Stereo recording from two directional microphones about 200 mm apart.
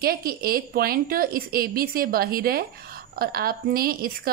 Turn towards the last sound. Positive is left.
turn(degrees=-50)  # may be behind; listen again after turning